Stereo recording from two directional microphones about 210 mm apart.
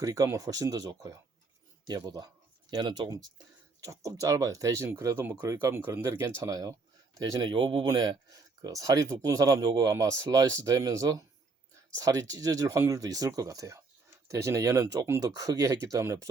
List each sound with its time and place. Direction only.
0.0 s speech: 15° right (ahead or behind)